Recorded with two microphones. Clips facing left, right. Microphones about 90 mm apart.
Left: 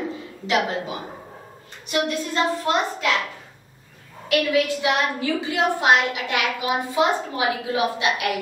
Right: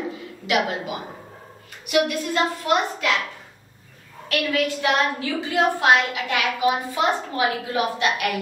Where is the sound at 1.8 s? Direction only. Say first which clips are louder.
Right 3 dB; 30° left (ahead or behind).